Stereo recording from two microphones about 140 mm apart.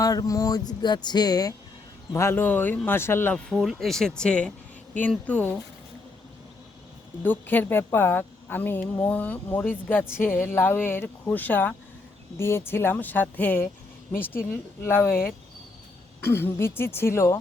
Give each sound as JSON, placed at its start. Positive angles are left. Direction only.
{"t": 0.0, "sound": "speech", "side_deg": 25}
{"t": 2.1, "sound": "speech", "side_deg": 15}
{"t": 3.5, "sound": "speech", "side_deg": 0}
{"t": 7.2, "sound": "speech", "side_deg": 15}
{"t": 16.2, "sound": "speech", "side_deg": 15}